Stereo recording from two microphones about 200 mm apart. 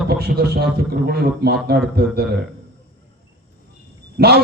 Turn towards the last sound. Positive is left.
turn(degrees=-55)  # may be behind; listen again after turning